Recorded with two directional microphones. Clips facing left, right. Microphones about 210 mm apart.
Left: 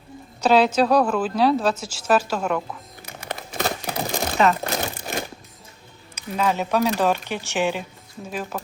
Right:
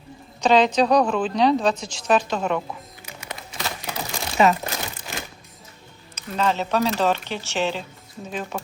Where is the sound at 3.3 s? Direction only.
50° left (ahead or behind).